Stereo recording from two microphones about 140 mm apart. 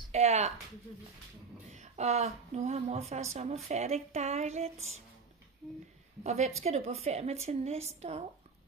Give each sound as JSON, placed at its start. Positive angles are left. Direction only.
{"t": 0.1, "sound": "speech", "side_deg": -50}
{"t": 1.7, "sound": "a woman's voice", "side_deg": -55}
{"t": 5.6, "sound": "speech", "side_deg": 5}
{"t": 6.2, "sound": "a woman's voice", "side_deg": -55}